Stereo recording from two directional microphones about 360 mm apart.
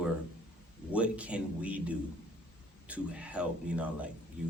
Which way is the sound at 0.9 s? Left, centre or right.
Centre.